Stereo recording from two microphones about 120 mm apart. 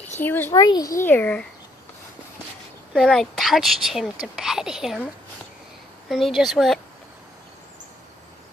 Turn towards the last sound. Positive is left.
turn(degrees=0)  # may be behind; listen again after turning